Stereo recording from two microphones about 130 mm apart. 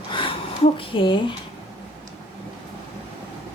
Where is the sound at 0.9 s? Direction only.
40° left (ahead or behind).